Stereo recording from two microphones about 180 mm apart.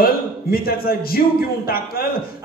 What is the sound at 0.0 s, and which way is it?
A man's voice, 55° left (ahead or behind).